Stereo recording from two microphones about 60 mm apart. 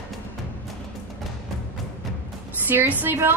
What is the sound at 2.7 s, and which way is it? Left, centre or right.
Speech, right.